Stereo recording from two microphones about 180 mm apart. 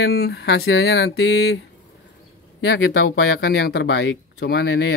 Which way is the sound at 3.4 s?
65° left (ahead or behind).